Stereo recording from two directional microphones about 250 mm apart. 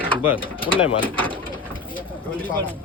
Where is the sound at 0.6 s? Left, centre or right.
Left.